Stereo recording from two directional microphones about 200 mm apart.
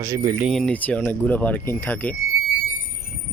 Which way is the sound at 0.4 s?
Centre (ahead or behind).